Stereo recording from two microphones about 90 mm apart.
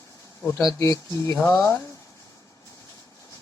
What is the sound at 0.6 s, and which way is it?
Speech, 40° left (ahead or behind).